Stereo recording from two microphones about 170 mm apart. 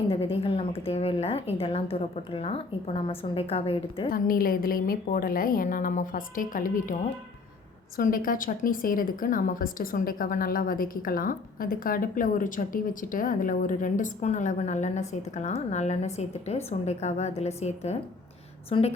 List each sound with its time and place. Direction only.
0.1 s a woman's voice: 35° left (ahead or behind)
4.1 s a woman's voice: 60° left (ahead or behind)
7.9 s a woman's voice: 55° left (ahead or behind); by 18.9 s 40° left (ahead or behind)